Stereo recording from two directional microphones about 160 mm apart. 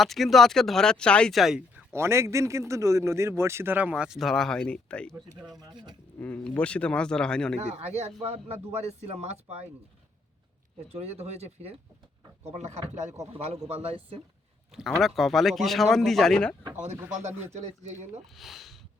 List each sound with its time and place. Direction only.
0.0 s speech: centre (ahead or behind)
2.0 s a man's voice: 15° right (ahead or behind); by 5.1 s 5° left (ahead or behind)
5.1 s a man's voice: 15° right (ahead or behind)
6.1 s speech: 10° left (ahead or behind)
7.6 s speech: 40° right (ahead or behind)
10.8 s speech: 40° right (ahead or behind)
14.7 s speech: centre (ahead or behind)
16.8 s speech: 45° right (ahead or behind)
18.3 s speech: centre (ahead or behind)